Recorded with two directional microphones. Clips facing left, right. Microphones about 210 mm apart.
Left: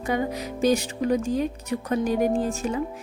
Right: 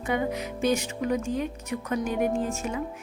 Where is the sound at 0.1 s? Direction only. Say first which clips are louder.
Left 1 dB; 35° left (ahead or behind).